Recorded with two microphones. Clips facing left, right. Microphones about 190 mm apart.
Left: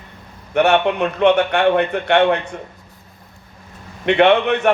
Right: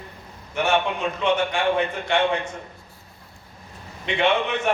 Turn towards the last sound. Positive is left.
turn(degrees=65)  # may be behind; listen again after turning